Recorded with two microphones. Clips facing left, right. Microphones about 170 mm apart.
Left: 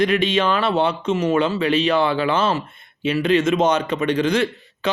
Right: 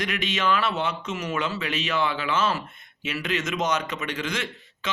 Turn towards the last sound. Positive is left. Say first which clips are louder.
# left 12 dB
turn(degrees=35)  # may be behind; listen again after turning